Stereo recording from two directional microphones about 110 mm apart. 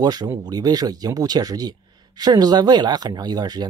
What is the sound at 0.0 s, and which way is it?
Speech, 35° right (ahead or behind).